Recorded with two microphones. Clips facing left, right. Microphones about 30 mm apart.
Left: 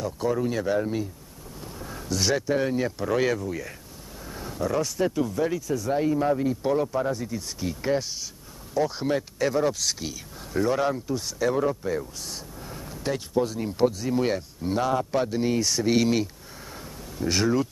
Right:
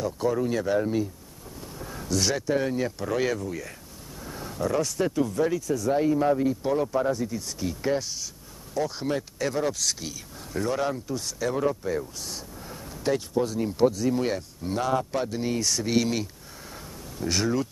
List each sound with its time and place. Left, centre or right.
0.0 s speech: centre